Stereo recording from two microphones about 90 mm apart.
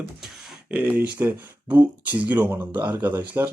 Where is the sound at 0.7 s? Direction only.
15° right (ahead or behind).